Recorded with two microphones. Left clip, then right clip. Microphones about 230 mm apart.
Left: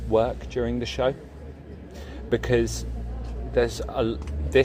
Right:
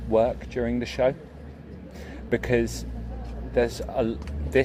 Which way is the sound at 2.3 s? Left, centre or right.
Centre.